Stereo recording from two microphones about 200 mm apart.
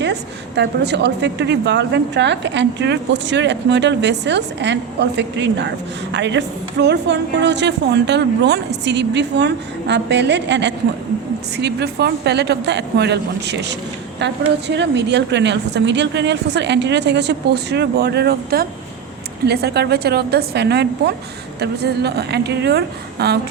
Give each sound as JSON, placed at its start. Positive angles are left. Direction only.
{"t": 0.0, "sound": "a woman's voice", "side_deg": -60}